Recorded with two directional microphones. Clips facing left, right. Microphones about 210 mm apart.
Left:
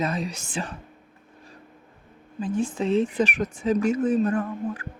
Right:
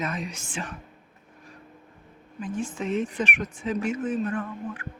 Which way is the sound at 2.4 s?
35° left (ahead or behind).